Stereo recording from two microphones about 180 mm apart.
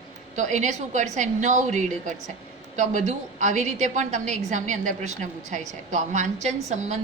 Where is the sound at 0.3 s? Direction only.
45° right (ahead or behind).